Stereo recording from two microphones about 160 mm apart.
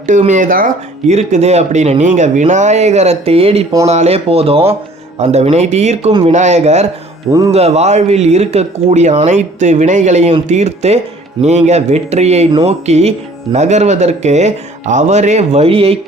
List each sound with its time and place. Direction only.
0.1 s speech: 50° right (ahead or behind)